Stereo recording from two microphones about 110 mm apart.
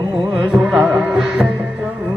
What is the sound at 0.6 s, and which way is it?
Music, 15° right (ahead or behind).